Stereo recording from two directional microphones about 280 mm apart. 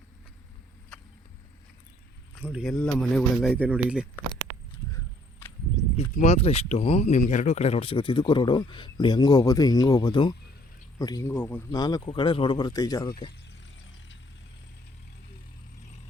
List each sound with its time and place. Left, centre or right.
2.4 s speech: centre
6.1 s speech: left